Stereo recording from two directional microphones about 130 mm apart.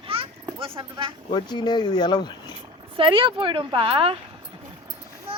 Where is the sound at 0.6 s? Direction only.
40° right (ahead or behind).